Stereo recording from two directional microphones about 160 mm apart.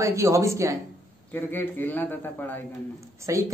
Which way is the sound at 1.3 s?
15° left (ahead or behind).